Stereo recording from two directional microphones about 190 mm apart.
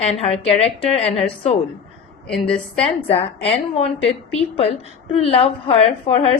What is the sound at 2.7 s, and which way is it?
A woman's voice, 30° left (ahead or behind).